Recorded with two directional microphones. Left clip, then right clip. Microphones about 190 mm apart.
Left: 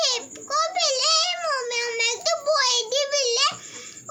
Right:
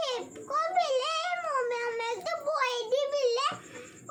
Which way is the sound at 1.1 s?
75° left (ahead or behind).